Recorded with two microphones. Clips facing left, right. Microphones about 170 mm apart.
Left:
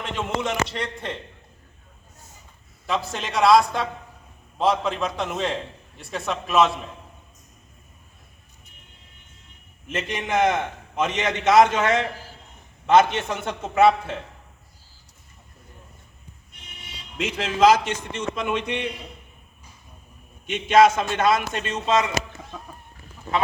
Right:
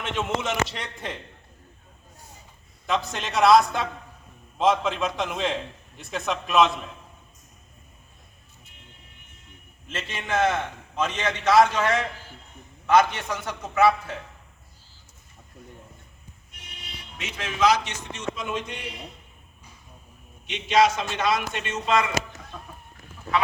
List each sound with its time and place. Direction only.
0.0 s a man's voice: centre (ahead or behind)
3.1 s a man's voice: centre (ahead or behind)
9.8 s a man's voice: 15° left (ahead or behind)
17.2 s a man's voice: 55° left (ahead or behind); by 18.9 s 70° left (ahead or behind)
20.5 s speech: 50° left (ahead or behind)
21.6 s a man's voice: 30° left (ahead or behind)